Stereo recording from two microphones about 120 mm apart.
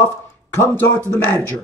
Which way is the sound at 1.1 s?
20° left (ahead or behind).